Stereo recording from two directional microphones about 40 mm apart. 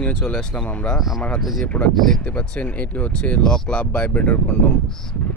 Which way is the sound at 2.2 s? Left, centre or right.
Left.